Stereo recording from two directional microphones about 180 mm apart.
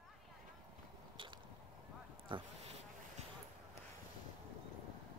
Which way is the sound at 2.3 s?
30° right (ahead or behind).